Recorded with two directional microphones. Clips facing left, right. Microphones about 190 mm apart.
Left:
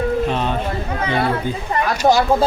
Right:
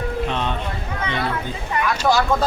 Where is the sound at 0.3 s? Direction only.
5° left (ahead or behind).